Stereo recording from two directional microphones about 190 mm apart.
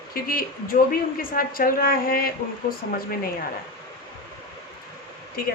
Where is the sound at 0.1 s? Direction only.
50° left (ahead or behind).